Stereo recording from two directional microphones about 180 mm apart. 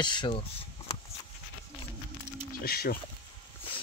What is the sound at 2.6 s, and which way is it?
Speech, 60° left (ahead or behind).